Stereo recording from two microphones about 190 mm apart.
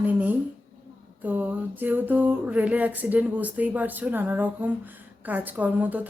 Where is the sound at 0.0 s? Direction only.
10° right (ahead or behind).